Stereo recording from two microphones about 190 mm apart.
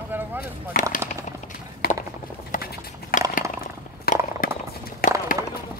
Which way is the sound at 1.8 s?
55° left (ahead or behind).